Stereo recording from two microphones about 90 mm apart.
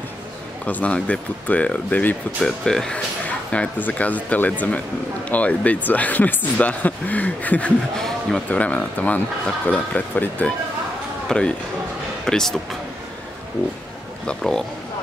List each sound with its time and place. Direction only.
0.7 s speech: 15° left (ahead or behind)
2.6 s speech: 5° left (ahead or behind)
14.2 s speech: 5° left (ahead or behind)